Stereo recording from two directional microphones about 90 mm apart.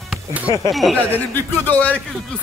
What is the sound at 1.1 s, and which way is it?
Speech, 20° left (ahead or behind).